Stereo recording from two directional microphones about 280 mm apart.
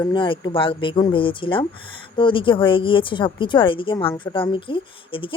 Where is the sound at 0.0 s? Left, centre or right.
Centre.